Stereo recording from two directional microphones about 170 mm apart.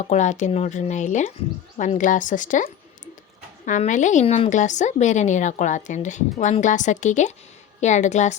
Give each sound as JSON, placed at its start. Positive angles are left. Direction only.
{"t": 0.0, "sound": "a woman's voice", "side_deg": 45}
{"t": 3.7, "sound": "a woman's voice", "side_deg": 45}